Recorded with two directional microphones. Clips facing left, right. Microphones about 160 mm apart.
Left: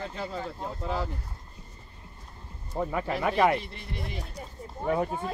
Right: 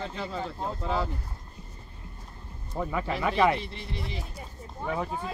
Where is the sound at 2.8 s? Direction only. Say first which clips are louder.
Left 1 dB; 40° left (ahead or behind).